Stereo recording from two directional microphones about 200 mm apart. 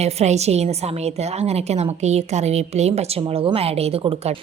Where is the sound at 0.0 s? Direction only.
35° right (ahead or behind).